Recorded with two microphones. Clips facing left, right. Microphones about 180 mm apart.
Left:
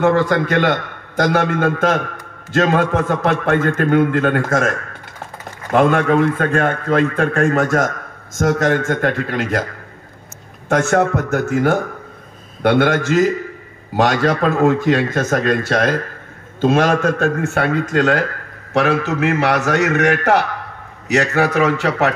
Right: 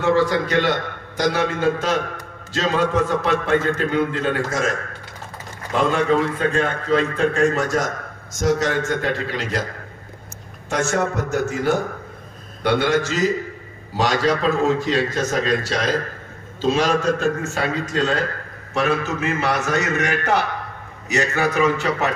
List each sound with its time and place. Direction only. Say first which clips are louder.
0.0 s a man's voice: left 3 dB; 55° left (ahead or behind)
10.7 s a man's voice: left 6 dB; 55° left (ahead or behind)
18.7 s a man's voice: left 5 dB; 80° left